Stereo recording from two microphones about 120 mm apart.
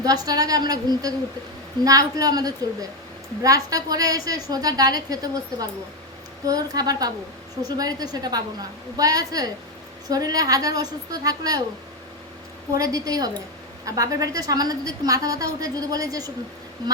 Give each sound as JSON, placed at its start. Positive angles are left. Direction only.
{"t": 0.0, "sound": "a woman's voice", "side_deg": -30}
{"t": 12.7, "sound": "a woman's voice", "side_deg": -30}